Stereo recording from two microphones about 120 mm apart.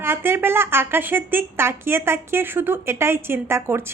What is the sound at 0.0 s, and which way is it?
A woman's voice, 20° right (ahead or behind).